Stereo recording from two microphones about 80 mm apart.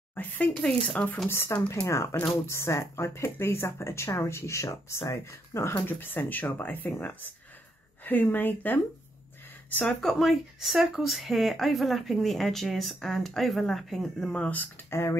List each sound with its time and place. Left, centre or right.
0.1 s speech: left
0.6 s speech: centre
1.3 s speech: left
2.5 s speech: left
8.0 s speech: left
9.8 s speech: centre
14.3 s speech: centre
14.9 s speech: left